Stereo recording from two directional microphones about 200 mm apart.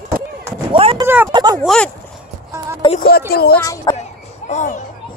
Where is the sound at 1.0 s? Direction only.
10° right (ahead or behind).